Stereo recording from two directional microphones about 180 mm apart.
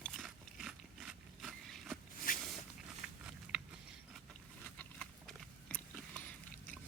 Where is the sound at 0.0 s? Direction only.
Centre (ahead or behind).